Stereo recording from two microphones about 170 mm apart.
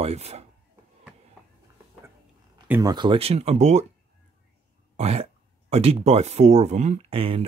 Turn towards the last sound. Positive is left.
turn(degrees=-35)  # may be behind; listen again after turning